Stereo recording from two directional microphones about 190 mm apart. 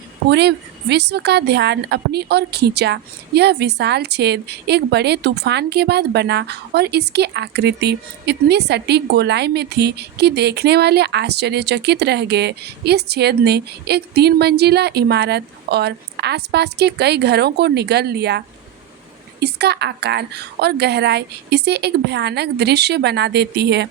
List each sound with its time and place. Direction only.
0.3 s a woman's voice: 60° right (ahead or behind)